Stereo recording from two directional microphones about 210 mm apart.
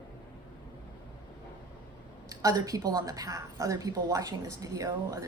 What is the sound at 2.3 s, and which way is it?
A woman's voice, 15° right (ahead or behind).